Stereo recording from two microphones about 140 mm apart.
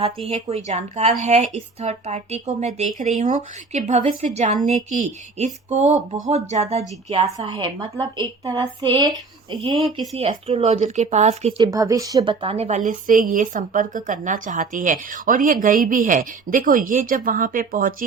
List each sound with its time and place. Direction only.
0.3 s speech: 50° right (ahead or behind)
7.3 s a woman's voice: 35° right (ahead or behind)
10.2 s speech: 45° right (ahead or behind)
11.6 s a woman's voice: 25° right (ahead or behind); by 17.9 s 80° right